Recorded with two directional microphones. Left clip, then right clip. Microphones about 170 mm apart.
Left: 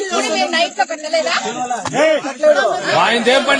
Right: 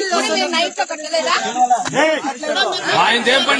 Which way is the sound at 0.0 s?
20° left (ahead or behind).